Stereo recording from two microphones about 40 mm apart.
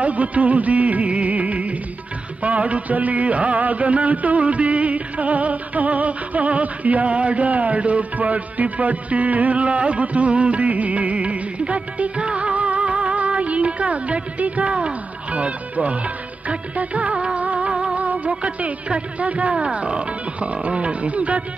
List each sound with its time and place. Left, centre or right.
0.0 s music: right
14.8 s speech: right
16.4 s music of bollywood: right
18.0 s music: right